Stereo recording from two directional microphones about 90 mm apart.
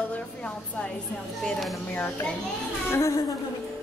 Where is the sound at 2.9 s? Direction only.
30° left (ahead or behind).